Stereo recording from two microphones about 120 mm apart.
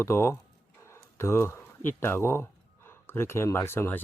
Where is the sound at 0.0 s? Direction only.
20° left (ahead or behind).